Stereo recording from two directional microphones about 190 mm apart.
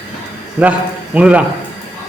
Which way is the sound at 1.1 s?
5° right (ahead or behind).